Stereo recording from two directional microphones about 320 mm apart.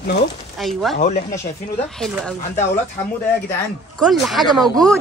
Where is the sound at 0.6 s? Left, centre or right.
Centre.